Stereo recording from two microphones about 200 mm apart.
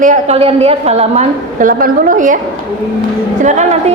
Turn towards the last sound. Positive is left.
turn(degrees=-35)  # may be behind; listen again after turning